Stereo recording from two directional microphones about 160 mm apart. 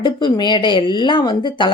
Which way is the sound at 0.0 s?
30° left (ahead or behind).